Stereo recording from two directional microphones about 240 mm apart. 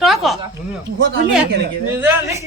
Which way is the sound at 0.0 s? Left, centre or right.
Centre.